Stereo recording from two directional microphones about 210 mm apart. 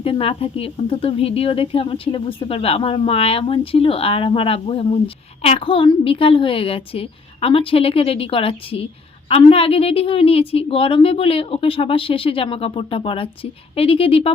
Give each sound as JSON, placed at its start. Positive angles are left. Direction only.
{"t": 0.0, "sound": "speech", "side_deg": 25}